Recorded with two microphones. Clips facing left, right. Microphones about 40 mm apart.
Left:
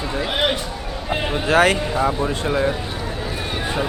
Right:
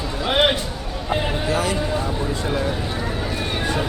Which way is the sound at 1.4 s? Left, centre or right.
Left.